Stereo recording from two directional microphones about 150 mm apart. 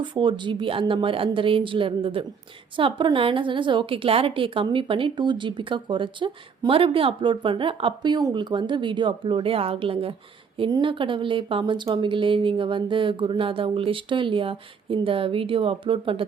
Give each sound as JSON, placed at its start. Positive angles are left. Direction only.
{"t": 0.0, "sound": "a woman's voice", "side_deg": -35}